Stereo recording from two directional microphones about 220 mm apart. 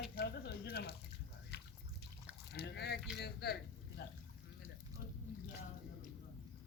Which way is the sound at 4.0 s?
45° left (ahead or behind).